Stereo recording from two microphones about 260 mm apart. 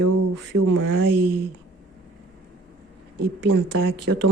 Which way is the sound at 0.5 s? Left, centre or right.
Right.